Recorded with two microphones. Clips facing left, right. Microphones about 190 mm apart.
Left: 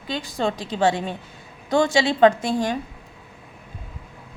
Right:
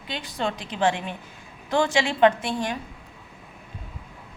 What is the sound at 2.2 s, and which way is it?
Speech, 35° left (ahead or behind).